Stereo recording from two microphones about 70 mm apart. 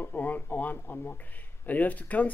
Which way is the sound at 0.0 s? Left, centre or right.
Left.